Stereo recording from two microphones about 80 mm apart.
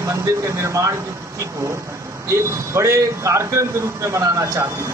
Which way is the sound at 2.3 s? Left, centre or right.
Right.